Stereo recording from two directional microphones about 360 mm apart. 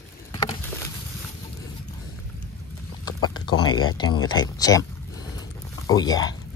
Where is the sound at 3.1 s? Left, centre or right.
Left.